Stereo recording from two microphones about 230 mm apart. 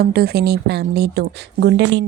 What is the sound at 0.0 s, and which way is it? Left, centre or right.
Speech, right.